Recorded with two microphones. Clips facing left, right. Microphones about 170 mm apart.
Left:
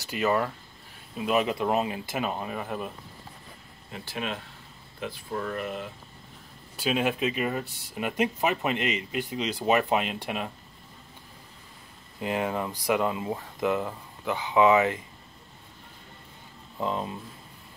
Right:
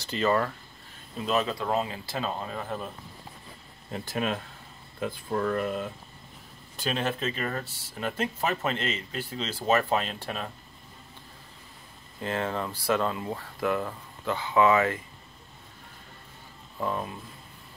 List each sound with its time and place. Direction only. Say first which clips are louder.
0.0 s speech: even; 15° left (ahead or behind)
3.9 s speech: right 4 dB; 45° right (ahead or behind)
6.8 s speech: left 3 dB; 10° left (ahead or behind)
12.2 s speech: left 2 dB; 15° left (ahead or behind)
16.8 s speech: left 1 dB; 20° left (ahead or behind)